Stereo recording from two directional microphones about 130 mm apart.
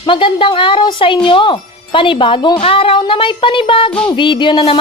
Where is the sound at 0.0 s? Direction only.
40° left (ahead or behind).